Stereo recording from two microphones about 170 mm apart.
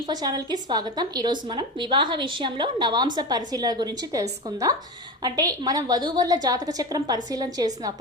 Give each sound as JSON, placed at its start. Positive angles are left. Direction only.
{"t": 0.1, "sound": "a woman's voice", "side_deg": -25}